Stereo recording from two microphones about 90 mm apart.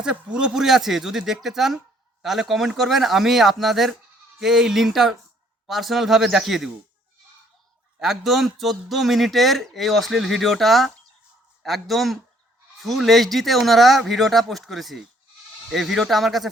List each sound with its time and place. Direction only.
0.3 s a man's voice: 5° right (ahead or behind)
7.9 s a man's voice: centre (ahead or behind)